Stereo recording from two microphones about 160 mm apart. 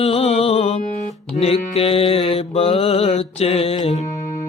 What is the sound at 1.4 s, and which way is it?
Mantra, 35° left (ahead or behind).